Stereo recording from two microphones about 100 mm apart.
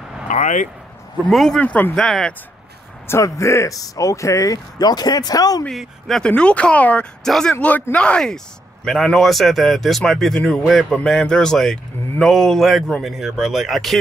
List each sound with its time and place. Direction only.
1.3 s speech: 5° left (ahead or behind)
1.6 s speech: 15° left (ahead or behind)
2.0 s speech: 5° left (ahead or behind)
3.1 s speech: 30° left (ahead or behind)
5.7 s speech: centre (ahead or behind)
6.3 s speech: 10° left (ahead or behind)
7.5 s speech: 15° left (ahead or behind); by 13.9 s centre (ahead or behind)